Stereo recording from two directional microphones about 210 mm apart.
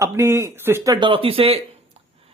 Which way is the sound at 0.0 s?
15° right (ahead or behind).